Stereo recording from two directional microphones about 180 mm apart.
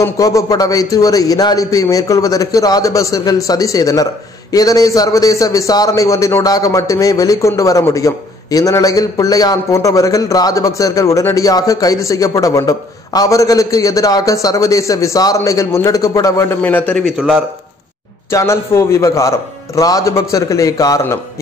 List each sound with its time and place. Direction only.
0.0 s a man's voice: 20° left (ahead or behind); by 17.4 s 5° right (ahead or behind)
18.3 s speech: 15° left (ahead or behind)